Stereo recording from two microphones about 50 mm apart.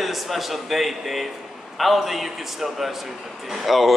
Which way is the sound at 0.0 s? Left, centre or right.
Centre.